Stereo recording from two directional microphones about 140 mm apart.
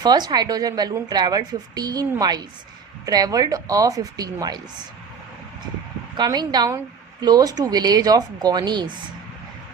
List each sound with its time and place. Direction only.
0.0 s a woman's voice: 30° right (ahead or behind)
6.1 s a woman's voice: 30° right (ahead or behind)